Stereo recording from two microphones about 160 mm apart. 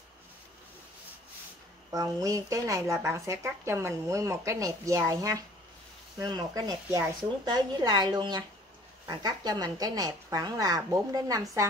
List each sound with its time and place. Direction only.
1.9 s speech: 20° right (ahead or behind)